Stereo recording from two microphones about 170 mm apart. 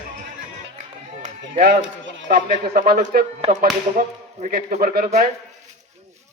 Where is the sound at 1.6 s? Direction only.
80° right; by 5.2 s 60° right (ahead or behind).